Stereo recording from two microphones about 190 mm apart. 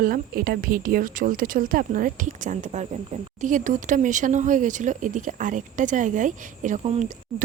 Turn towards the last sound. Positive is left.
turn(degrees=-35)  # may be behind; listen again after turning